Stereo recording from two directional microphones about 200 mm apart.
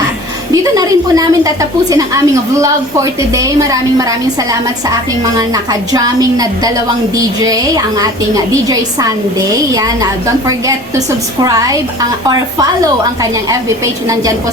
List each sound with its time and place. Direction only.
0.5 s a woman's voice: 15° right (ahead or behind)
5.9 s a woman's voice: 20° right (ahead or behind)
11.4 s a woman's voice: 15° right (ahead or behind)
13.5 s a woman's voice: 15° right (ahead or behind)